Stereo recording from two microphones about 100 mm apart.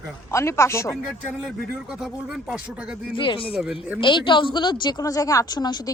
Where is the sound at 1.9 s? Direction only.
5° right (ahead or behind).